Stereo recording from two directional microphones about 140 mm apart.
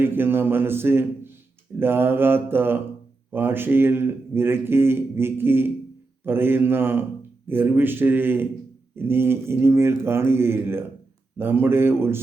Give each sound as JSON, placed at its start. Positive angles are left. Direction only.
{"t": 0.0, "sound": "speech", "side_deg": -15}